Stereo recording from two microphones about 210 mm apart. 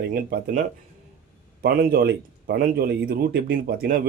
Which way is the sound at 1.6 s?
45° right (ahead or behind).